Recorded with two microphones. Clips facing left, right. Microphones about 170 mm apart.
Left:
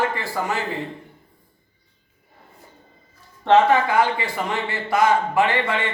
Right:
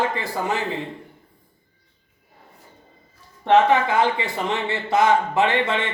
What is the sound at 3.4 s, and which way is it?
A man's voice, 15° right (ahead or behind).